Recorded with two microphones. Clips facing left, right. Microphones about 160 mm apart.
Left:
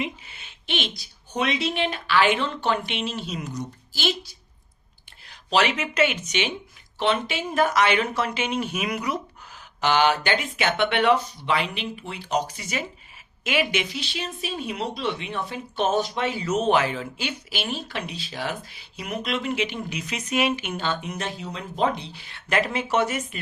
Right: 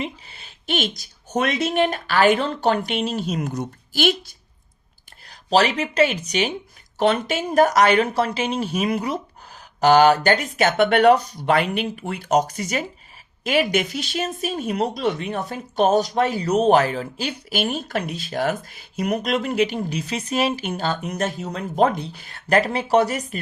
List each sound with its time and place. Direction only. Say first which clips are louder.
0.0 s speech: right 1 dB; 35° right (ahead or behind); by 4.4 s 55° right (ahead or behind)
5.3 s speech: right 4 dB; 35° right (ahead or behind)